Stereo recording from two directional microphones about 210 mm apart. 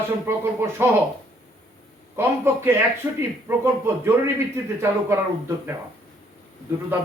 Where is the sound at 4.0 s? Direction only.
10° right (ahead or behind).